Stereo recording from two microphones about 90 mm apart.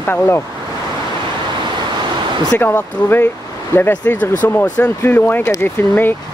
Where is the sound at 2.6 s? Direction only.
25° left (ahead or behind).